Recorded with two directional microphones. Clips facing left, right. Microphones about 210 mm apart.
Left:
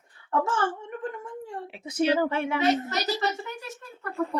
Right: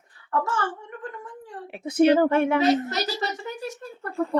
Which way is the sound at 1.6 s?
55° right (ahead or behind).